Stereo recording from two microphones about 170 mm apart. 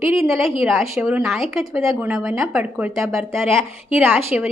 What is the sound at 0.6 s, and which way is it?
A woman's voice, centre (ahead or behind).